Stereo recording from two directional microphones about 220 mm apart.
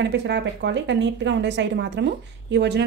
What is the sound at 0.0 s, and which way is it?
A woman's voice, 50° right (ahead or behind).